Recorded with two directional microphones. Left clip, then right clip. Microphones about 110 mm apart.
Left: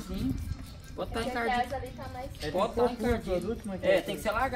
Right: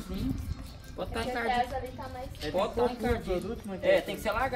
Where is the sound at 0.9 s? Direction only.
Centre (ahead or behind).